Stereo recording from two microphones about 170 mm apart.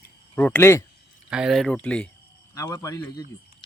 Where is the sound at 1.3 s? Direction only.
5° right (ahead or behind).